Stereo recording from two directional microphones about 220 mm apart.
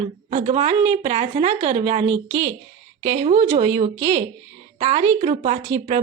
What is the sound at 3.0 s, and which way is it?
A woman's voice, 30° right (ahead or behind).